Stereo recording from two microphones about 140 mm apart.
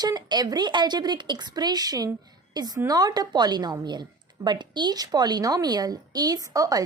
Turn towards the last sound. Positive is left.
turn(degrees=-25)  # may be behind; listen again after turning